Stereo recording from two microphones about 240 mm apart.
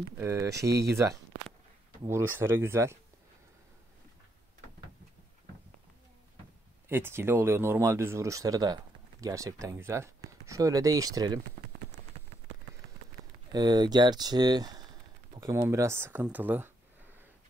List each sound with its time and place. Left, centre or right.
0.2 s speech: centre
6.9 s speech: centre
13.5 s speech: centre